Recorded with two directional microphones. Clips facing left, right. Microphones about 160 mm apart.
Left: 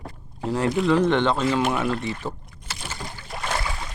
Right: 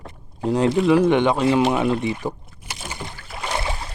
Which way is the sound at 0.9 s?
10° right (ahead or behind).